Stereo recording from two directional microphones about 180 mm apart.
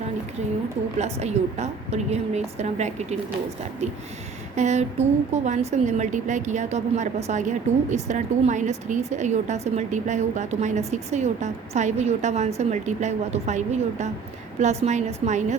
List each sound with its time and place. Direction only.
0.9 s a woman's voice: 40° right (ahead or behind)
4.5 s a woman's voice: 40° right (ahead or behind)